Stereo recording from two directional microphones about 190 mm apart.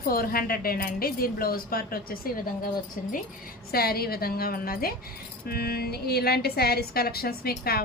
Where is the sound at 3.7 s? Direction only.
55° left (ahead or behind).